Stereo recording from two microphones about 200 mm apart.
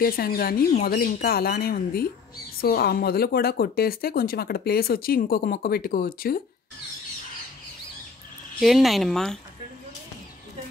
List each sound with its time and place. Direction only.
0.0 s speech: 45° left (ahead or behind)
8.5 s speech: centre (ahead or behind)